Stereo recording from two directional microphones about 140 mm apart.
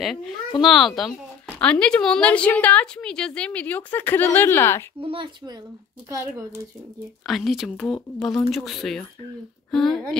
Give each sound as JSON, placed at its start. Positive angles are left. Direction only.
{"t": 0.0, "sound": "a woman's voice", "side_deg": 0}
{"t": 5.0, "sound": "speech", "side_deg": -40}
{"t": 7.2, "sound": "speech", "side_deg": 0}
{"t": 9.7, "sound": "a sound", "side_deg": 0}